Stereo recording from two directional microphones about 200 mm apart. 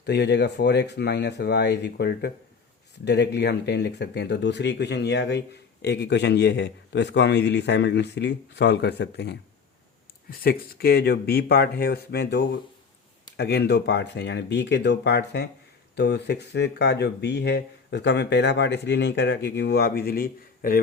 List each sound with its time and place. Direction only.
0.0 s speech: 55° left (ahead or behind)
10.4 s speech: 50° left (ahead or behind)